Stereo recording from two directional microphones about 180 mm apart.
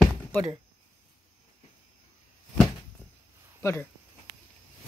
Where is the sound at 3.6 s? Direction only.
15° left (ahead or behind).